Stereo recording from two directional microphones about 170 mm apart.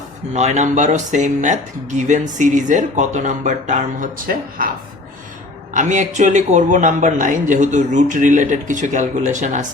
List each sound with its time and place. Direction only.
0.3 s speech: 40° right (ahead or behind)
5.7 s speech: 45° right (ahead or behind)